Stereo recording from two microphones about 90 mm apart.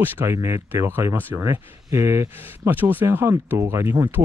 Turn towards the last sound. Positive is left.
turn(degrees=-25)  # may be behind; listen again after turning